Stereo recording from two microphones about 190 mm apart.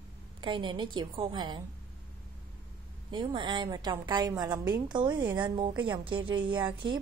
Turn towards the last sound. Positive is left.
turn(degrees=-25)  # may be behind; listen again after turning